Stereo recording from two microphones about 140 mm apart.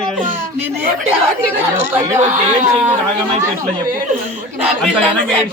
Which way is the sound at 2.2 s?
60° right (ahead or behind).